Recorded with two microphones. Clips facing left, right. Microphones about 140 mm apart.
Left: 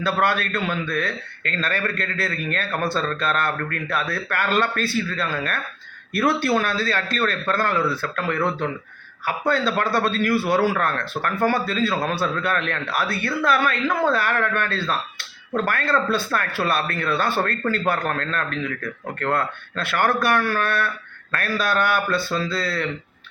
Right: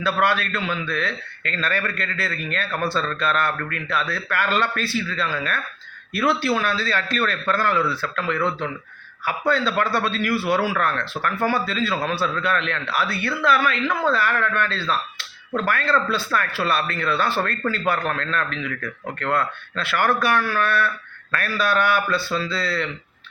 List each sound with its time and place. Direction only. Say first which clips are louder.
0.0 s a man's voice: even; 45° left (ahead or behind)